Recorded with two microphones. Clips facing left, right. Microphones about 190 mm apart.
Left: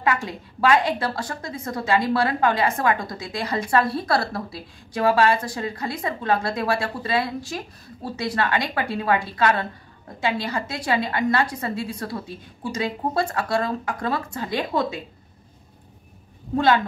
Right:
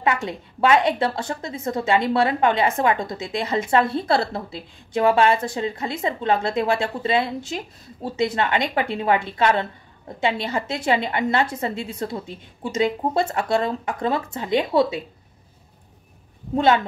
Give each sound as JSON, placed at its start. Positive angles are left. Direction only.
{"t": 0.0, "sound": "a woman's voice", "side_deg": -25}
{"t": 16.5, "sound": "a woman's voice", "side_deg": -20}